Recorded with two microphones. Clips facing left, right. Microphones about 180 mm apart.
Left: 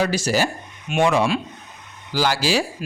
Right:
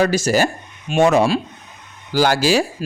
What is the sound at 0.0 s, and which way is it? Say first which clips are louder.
A man's voice: right 4 dB; 45° right (ahead or behind).